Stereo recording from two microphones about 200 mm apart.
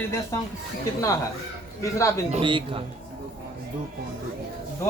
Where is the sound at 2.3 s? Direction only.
25° right (ahead or behind).